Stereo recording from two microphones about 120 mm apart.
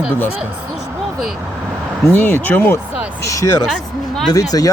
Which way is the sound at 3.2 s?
25° left (ahead or behind).